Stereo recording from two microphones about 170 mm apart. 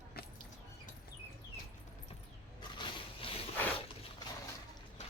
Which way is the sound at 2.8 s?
30° left (ahead or behind).